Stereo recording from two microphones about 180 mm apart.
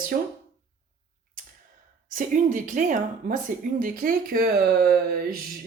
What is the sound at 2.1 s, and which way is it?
Speech, 45° right (ahead or behind).